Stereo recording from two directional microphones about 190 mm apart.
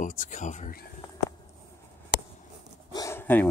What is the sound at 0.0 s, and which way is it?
Speech, 40° left (ahead or behind).